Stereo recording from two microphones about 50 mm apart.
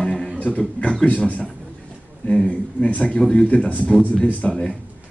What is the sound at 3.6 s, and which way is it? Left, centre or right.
Speech, left.